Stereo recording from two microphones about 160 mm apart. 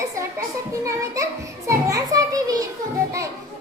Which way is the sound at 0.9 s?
20° right (ahead or behind).